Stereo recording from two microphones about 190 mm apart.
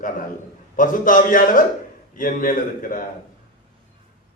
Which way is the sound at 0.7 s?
45° left (ahead or behind).